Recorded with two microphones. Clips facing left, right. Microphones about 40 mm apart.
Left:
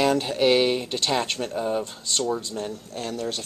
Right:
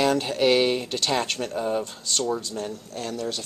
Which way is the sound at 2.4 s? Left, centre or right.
Centre.